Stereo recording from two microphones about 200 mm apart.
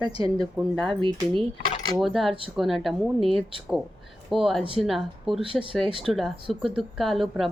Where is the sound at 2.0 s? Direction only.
Centre (ahead or behind).